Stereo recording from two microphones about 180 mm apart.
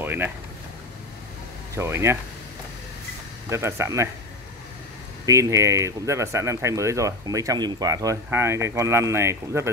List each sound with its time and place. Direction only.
0.0 s a sound: 10° right (ahead or behind)
1.8 s speech: 15° right (ahead or behind)
3.4 s speech: 15° right (ahead or behind)
5.2 s speech: 15° right (ahead or behind)